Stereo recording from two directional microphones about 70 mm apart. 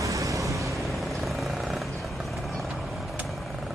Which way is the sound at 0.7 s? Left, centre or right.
Centre.